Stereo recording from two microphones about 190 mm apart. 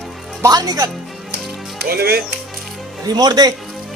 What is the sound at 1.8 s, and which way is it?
Speech, 55° right (ahead or behind).